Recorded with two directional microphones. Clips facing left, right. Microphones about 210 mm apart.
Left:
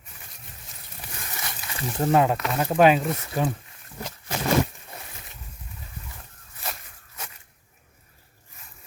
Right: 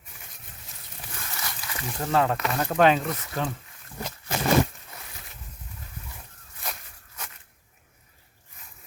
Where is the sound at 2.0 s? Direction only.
15° left (ahead or behind).